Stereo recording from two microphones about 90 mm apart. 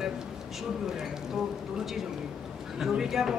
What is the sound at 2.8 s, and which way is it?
Speech, 5° right (ahead or behind).